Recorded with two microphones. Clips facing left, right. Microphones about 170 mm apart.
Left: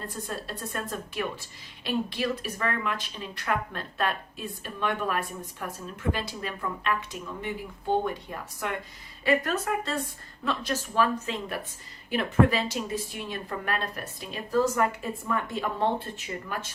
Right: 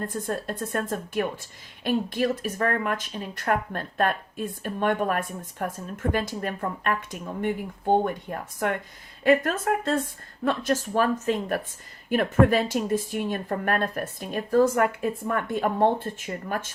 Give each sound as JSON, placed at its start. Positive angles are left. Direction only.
{"t": 0.1, "sound": "a woman's voice", "side_deg": -50}